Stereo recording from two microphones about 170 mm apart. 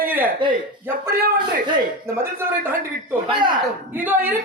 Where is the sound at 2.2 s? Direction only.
15° right (ahead or behind).